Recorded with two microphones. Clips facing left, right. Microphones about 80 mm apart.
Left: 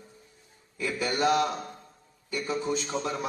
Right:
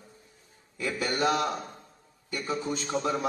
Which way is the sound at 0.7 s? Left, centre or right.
Right.